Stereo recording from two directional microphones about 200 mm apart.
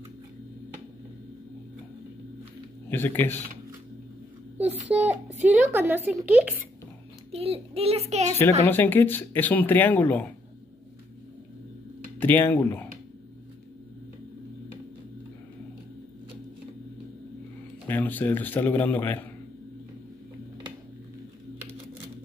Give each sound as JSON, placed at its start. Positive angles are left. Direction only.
{"t": 2.9, "sound": "speech", "side_deg": 10}
{"t": 4.6, "sound": "a child's voice", "side_deg": -10}
{"t": 7.2, "sound": "child singing", "side_deg": -30}
{"t": 8.4, "sound": "speech", "side_deg": 10}
{"t": 12.2, "sound": "speech", "side_deg": 10}
{"t": 17.8, "sound": "speech", "side_deg": 10}